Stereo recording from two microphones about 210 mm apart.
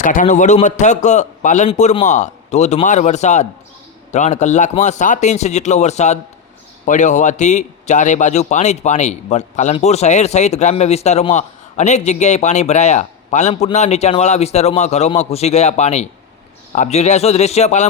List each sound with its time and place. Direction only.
0.0 s a man's voice: 35° left (ahead or behind)